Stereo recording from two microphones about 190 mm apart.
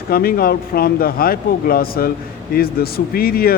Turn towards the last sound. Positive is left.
turn(degrees=50)  # may be behind; listen again after turning